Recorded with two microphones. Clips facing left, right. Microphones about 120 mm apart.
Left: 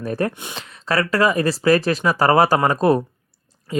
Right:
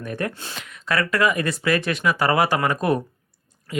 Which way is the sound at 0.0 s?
35° left (ahead or behind).